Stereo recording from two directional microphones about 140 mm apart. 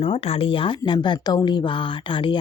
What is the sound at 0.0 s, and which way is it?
Speech, 40° left (ahead or behind).